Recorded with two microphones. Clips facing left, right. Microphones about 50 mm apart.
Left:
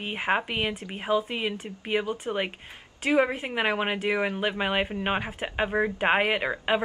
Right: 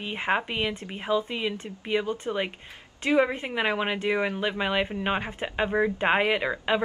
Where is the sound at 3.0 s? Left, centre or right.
Centre.